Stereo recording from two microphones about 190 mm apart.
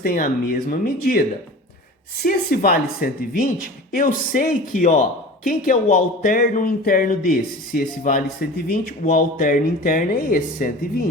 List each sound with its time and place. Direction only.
0.0 s speech: 50° left (ahead or behind)
2.2 s speech: 55° left (ahead or behind)